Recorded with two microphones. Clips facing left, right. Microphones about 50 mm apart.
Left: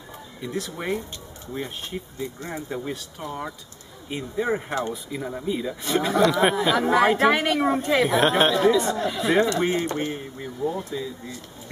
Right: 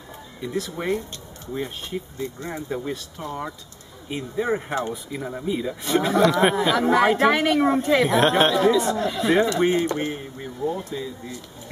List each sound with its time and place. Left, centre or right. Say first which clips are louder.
0.4 s speech: right 2 dB; centre
10.9 s speech: even; centre